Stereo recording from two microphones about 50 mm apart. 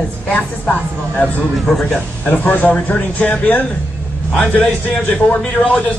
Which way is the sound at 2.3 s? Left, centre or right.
Left.